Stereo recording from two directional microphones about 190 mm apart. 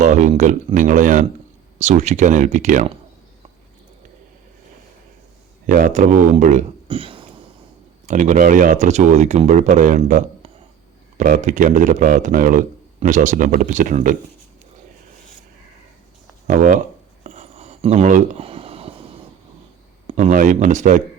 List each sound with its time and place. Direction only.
0.0 s speech: 40° right (ahead or behind)
5.6 s speech: 45° right (ahead or behind)
6.8 s a sound: 30° right (ahead or behind)
8.0 s speech: 40° right (ahead or behind)
11.2 s speech: 45° right (ahead or behind)
16.5 s speech: 45° right (ahead or behind)
17.2 s a sound: 30° right (ahead or behind)
20.1 s speech: 40° right (ahead or behind)